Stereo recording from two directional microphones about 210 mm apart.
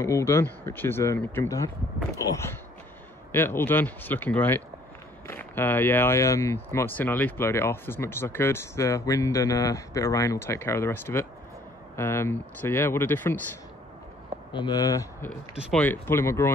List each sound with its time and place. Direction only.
0.0 s speech: 15° left (ahead or behind)
3.3 s speech: 10° left (ahead or behind)
14.5 s speech: 20° left (ahead or behind)
15.5 s speech: 5° left (ahead or behind)